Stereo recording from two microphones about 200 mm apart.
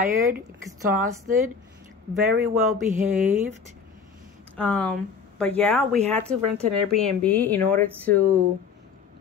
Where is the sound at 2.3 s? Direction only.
45° right (ahead or behind).